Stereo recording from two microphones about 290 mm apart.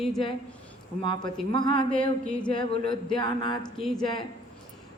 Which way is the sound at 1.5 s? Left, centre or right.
Centre.